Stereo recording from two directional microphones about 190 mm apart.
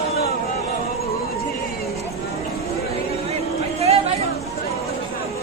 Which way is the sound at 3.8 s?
35° right (ahead or behind).